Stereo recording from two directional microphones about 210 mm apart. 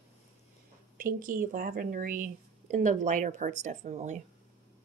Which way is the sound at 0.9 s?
40° right (ahead or behind).